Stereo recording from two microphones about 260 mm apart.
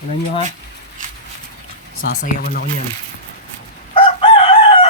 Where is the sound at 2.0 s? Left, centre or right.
Left.